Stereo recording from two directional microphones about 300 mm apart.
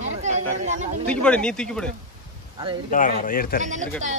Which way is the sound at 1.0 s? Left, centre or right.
Centre.